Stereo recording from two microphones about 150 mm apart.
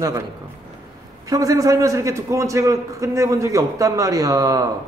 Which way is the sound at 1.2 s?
25° right (ahead or behind).